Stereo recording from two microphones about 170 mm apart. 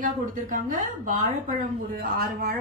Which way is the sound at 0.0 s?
50° right (ahead or behind).